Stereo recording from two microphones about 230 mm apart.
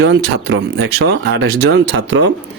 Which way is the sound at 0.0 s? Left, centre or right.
Right.